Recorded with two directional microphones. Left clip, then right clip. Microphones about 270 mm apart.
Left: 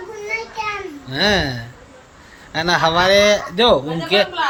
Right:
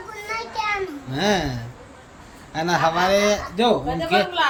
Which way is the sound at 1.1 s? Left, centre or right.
Centre.